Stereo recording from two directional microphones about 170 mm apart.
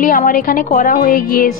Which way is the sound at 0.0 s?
55° left (ahead or behind).